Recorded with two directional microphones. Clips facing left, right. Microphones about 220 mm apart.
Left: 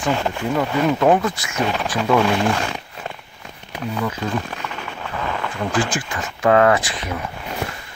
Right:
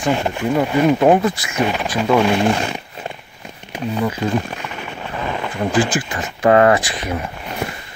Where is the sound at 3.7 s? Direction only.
15° right (ahead or behind).